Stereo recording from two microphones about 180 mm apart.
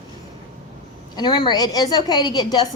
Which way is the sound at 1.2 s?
25° left (ahead or behind).